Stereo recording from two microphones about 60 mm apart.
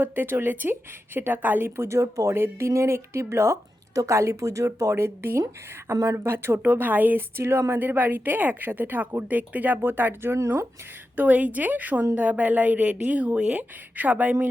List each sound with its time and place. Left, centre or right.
0.0 s speech: right
1.7 s speech: right
2.3 s speech: right
2.6 s speech: right
7.3 s speech: right
7.7 s speech: right